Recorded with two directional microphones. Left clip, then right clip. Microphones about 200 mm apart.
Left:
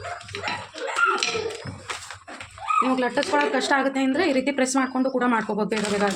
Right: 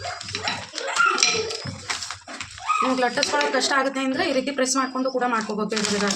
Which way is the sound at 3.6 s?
30° left (ahead or behind).